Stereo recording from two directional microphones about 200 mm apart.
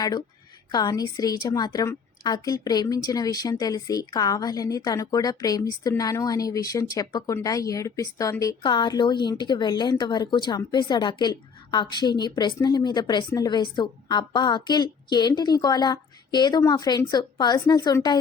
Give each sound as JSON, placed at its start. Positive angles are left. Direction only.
{"t": 0.7, "sound": "a woman's voice", "side_deg": 20}